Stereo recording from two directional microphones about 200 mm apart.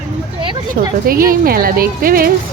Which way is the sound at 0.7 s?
45° right (ahead or behind).